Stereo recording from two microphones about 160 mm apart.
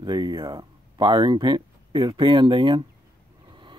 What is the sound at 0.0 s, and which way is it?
Speech, 25° right (ahead or behind).